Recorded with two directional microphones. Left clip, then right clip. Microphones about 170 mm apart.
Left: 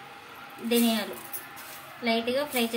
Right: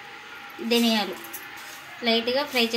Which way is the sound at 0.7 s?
45° right (ahead or behind).